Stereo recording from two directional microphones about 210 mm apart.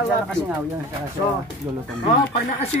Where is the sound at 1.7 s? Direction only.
10° right (ahead or behind).